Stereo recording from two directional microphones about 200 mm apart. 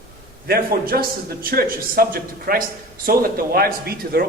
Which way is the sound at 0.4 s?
50° right (ahead or behind).